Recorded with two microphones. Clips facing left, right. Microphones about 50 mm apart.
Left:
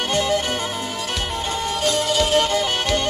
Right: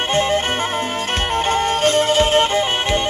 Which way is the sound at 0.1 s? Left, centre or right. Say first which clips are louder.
Right 3 dB; right.